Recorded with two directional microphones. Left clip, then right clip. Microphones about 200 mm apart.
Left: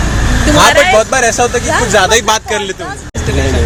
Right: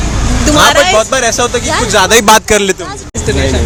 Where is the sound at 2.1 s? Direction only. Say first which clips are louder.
Right 5 dB; 55° right (ahead or behind).